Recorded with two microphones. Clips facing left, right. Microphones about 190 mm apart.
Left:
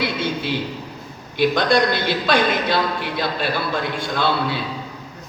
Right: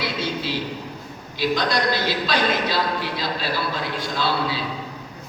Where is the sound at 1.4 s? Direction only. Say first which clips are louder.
Left 5 dB; 55° left (ahead or behind).